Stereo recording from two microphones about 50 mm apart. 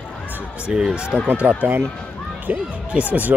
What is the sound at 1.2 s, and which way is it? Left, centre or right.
Speech, right.